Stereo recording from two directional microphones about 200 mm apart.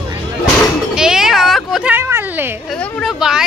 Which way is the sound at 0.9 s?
5° right (ahead or behind).